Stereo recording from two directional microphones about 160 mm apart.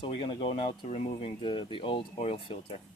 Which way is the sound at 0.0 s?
35° left (ahead or behind).